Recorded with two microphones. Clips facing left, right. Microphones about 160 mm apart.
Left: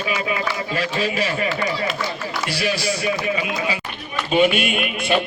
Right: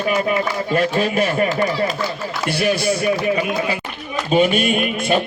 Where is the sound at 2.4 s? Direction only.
50° right (ahead or behind).